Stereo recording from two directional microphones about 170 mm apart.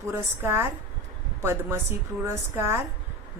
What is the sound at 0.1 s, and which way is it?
A woman's voice, 15° right (ahead or behind).